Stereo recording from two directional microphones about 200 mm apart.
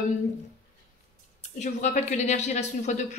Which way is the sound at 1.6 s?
35° left (ahead or behind).